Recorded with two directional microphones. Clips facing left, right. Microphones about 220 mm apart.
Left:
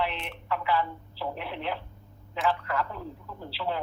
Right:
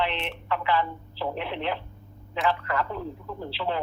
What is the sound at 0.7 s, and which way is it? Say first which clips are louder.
Speech: right 2 dB; 90° right.